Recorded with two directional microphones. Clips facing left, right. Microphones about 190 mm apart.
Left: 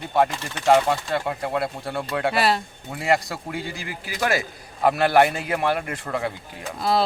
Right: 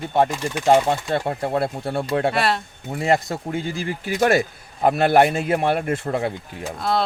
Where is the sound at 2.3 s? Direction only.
Centre (ahead or behind).